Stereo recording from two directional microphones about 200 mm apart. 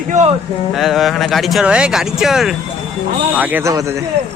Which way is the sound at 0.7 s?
Centre (ahead or behind).